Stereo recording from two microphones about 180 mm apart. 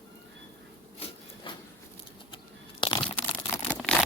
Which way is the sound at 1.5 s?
25° left (ahead or behind).